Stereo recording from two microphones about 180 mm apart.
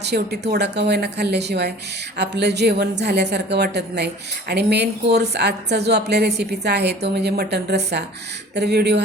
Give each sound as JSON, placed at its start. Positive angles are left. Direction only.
{"t": 0.0, "sound": "a woman's voice", "side_deg": -65}